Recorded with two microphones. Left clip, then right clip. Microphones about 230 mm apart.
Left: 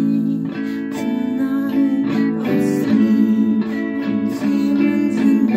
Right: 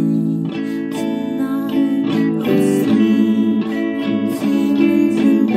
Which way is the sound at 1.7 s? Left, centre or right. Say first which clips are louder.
Right 3 dB; right.